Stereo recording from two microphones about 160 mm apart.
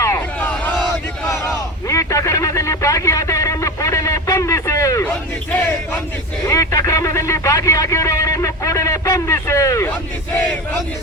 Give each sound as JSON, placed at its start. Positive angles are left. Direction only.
{"t": 0.0, "sound": "crowd", "side_deg": 15}
{"t": 1.3, "sound": "a sound", "side_deg": 20}
{"t": 6.4, "sound": "speech", "side_deg": 20}